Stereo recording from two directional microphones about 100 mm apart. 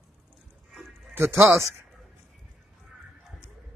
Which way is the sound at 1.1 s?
25° right (ahead or behind).